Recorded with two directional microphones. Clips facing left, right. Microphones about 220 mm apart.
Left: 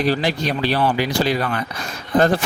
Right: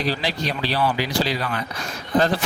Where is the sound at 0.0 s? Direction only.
50° left (ahead or behind).